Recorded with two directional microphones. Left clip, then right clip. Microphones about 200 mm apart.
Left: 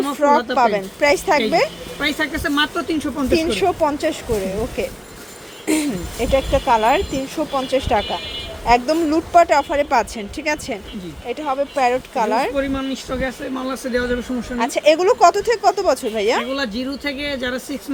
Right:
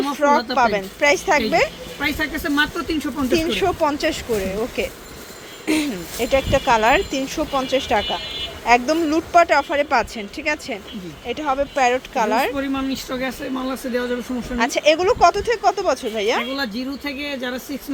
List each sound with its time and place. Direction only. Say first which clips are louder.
0.1 s speech: left 2 dB; 10° left (ahead or behind)
2.0 s speech: left 2 dB; 5° right (ahead or behind)
3.3 s speech: left 2 dB; 10° left (ahead or behind)
5.6 s speech: left 1 dB; 15° left (ahead or behind)
12.5 s speech: left 2 dB; 20° right (ahead or behind)
13.5 s speech: left 2 dB; 5° right (ahead or behind); by 16.4 s 10° left (ahead or behind)
16.4 s speech: left 2 dB; 5° right (ahead or behind)